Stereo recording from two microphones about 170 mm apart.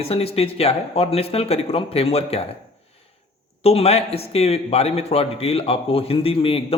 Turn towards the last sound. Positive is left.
turn(degrees=35)  # may be behind; listen again after turning